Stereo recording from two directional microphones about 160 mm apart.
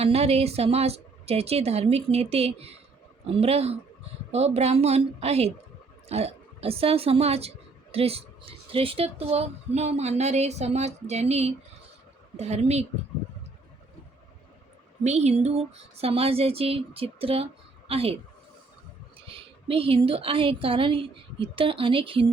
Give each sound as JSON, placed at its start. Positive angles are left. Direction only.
{"t": 0.0, "sound": "speech", "side_deg": -40}
{"t": 15.0, "sound": "speech", "side_deg": -45}
{"t": 19.3, "sound": "speech", "side_deg": -35}